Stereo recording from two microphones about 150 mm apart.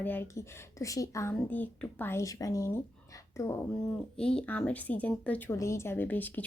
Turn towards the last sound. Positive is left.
turn(degrees=10)  # may be behind; listen again after turning